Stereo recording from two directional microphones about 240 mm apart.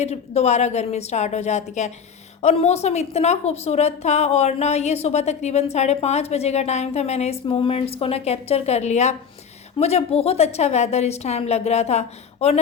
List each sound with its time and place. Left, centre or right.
0.0 s a woman's voice: left